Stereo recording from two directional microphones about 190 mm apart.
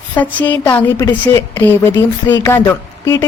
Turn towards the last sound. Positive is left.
turn(degrees=10)  # may be behind; listen again after turning